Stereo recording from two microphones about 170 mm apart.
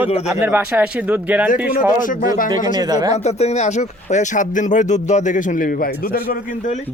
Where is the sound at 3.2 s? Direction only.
40° left (ahead or behind); by 6.7 s 60° left (ahead or behind).